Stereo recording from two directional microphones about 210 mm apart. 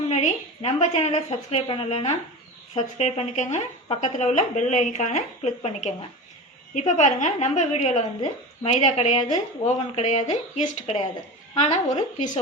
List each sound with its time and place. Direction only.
0.1 s a woman's voice: 35° left (ahead or behind)